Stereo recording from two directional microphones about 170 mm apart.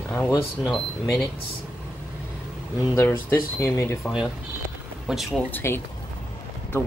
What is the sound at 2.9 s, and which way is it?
Speech, 15° left (ahead or behind).